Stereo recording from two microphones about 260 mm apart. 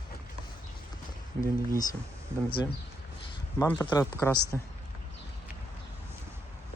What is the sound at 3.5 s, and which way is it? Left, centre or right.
Speech, centre.